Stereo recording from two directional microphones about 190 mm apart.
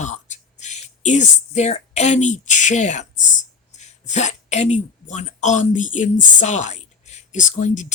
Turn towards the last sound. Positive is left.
turn(degrees=40)  # may be behind; listen again after turning